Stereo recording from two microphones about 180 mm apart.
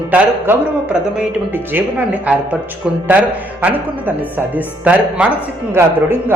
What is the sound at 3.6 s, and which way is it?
Speech, 10° right (ahead or behind).